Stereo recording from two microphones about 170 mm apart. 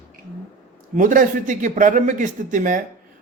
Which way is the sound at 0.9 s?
50° right (ahead or behind).